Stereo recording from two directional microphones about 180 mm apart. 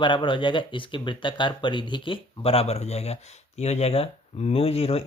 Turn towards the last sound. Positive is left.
turn(degrees=35)  # may be behind; listen again after turning